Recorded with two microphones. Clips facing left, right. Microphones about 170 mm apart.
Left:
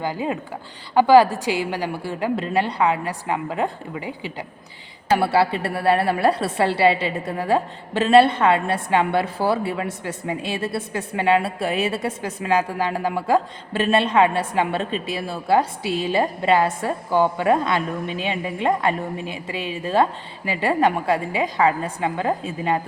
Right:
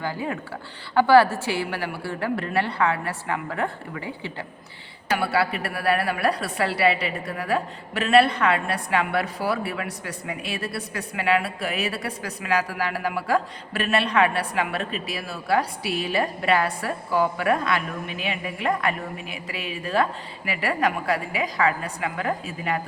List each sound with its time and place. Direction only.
0.0 s a woman's voice: 20° left (ahead or behind)
5.1 s a woman's voice: 30° left (ahead or behind)